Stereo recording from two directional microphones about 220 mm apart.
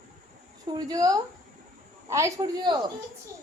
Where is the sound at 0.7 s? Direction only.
15° right (ahead or behind).